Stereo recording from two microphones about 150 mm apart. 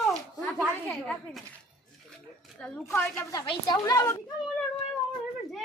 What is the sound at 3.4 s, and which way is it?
Speech, 30° left (ahead or behind).